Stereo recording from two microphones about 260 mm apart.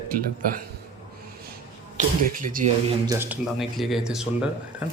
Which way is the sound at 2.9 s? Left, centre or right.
Centre.